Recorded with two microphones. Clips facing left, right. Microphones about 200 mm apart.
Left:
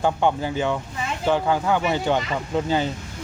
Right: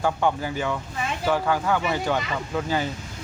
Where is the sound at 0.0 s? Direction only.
25° left (ahead or behind).